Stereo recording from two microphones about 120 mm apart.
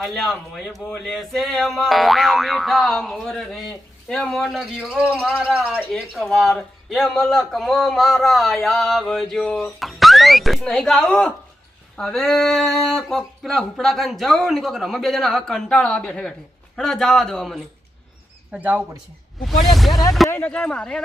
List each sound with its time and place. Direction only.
0.0 s speech: centre (ahead or behind)
18.5 s speech: 15° right (ahead or behind)
19.4 s speech: centre (ahead or behind)
20.3 s speech: 15° left (ahead or behind)